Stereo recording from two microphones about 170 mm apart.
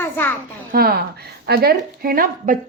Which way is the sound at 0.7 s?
65° right (ahead or behind).